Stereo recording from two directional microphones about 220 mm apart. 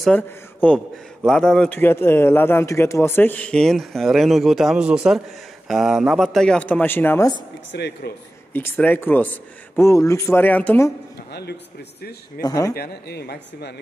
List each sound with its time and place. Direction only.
0.0 s a man's voice: 5° left (ahead or behind)
7.7 s speech: 50° left (ahead or behind)
8.5 s a man's voice: 10° left (ahead or behind)
12.4 s a man's voice: 15° left (ahead or behind)
12.7 s speech: 45° left (ahead or behind)